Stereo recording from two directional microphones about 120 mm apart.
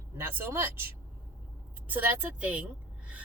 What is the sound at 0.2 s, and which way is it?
Speech, 15° right (ahead or behind).